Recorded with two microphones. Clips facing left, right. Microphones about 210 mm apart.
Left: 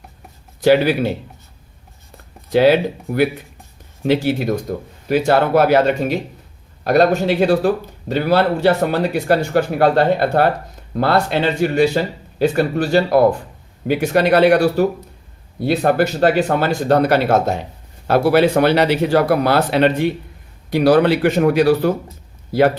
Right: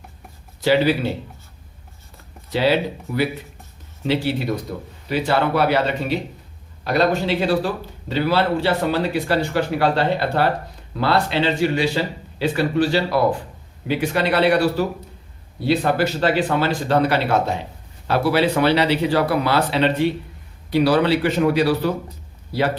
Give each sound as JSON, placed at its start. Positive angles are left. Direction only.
{"t": 0.6, "sound": "speech", "side_deg": 50}
{"t": 2.5, "sound": "speech", "side_deg": 50}